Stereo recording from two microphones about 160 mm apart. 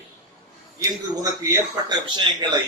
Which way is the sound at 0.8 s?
20° right (ahead or behind).